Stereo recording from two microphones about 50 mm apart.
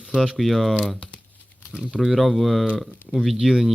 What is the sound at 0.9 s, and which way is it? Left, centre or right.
Crumpling, left.